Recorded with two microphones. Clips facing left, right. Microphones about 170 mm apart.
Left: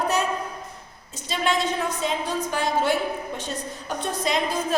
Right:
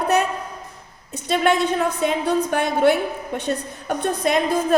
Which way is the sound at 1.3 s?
60° right (ahead or behind).